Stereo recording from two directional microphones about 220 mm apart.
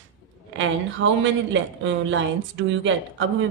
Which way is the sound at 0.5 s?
55° right (ahead or behind).